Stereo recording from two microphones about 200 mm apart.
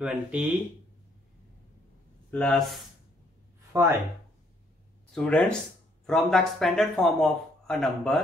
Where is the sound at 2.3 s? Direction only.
5° left (ahead or behind).